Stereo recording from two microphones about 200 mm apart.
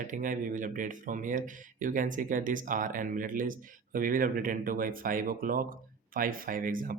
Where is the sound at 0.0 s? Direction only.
40° right (ahead or behind).